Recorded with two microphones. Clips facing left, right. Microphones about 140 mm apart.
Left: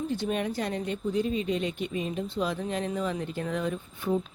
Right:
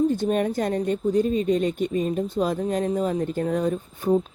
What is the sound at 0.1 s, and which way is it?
Speech, 45° right (ahead or behind).